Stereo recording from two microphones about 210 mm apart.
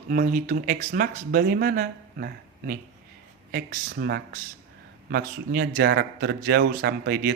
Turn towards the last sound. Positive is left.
turn(degrees=-50)  # may be behind; listen again after turning